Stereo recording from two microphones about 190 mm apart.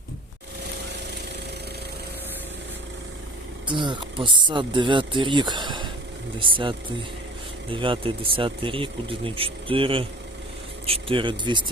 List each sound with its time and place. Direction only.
3.7 s speech: 25° right (ahead or behind)